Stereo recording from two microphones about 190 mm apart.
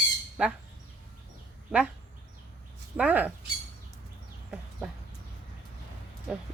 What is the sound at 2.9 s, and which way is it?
Speech, 5° right (ahead or behind).